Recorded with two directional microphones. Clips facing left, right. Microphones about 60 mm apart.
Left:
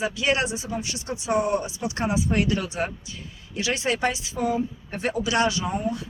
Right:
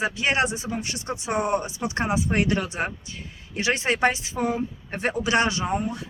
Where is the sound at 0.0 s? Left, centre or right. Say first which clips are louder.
Right 1 dB; right.